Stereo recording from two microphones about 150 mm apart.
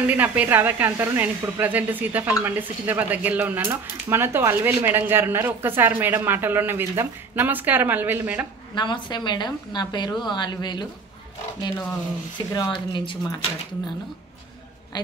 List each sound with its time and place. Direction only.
0.0 s speech: 10° right (ahead or behind)
8.7 s a woman's voice: 30° left (ahead or behind)
12.5 s speech: 30° left (ahead or behind)